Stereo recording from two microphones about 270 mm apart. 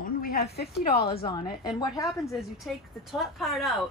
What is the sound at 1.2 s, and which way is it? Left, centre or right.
Speech, centre.